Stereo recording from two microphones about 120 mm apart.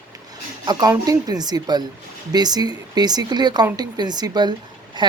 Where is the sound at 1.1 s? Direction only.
30° right (ahead or behind).